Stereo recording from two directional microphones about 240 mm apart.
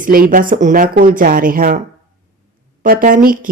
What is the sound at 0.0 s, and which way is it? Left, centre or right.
A woman's voice, right.